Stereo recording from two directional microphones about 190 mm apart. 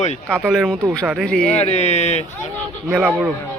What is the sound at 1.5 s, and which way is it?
Speech, 35° left (ahead or behind).